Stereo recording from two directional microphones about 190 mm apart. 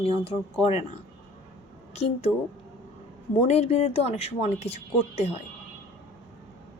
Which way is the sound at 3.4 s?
35° left (ahead or behind).